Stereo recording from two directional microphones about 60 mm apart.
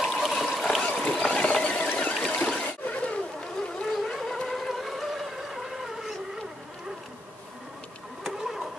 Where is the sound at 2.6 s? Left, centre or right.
Left.